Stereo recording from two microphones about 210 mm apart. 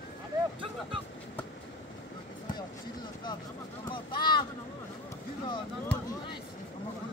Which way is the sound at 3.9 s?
25° left (ahead or behind).